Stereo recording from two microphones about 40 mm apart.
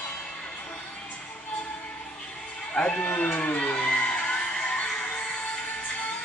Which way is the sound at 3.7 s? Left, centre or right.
Left.